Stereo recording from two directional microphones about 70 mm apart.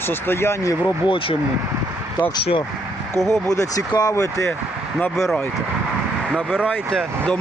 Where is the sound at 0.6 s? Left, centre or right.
Left.